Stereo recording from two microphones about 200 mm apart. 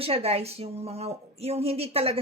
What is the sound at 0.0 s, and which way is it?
A man's voice, 30° right (ahead or behind).